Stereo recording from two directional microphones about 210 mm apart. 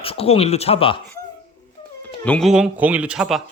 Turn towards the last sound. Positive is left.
turn(degrees=-5)  # may be behind; listen again after turning